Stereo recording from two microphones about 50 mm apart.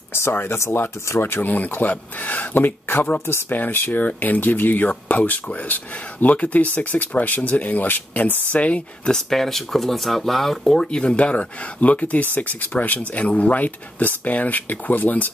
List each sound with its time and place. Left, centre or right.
0.1 s speech: left
1.2 s speech: left
9.1 s speech: centre
10.8 s speech: centre; by 15.2 s left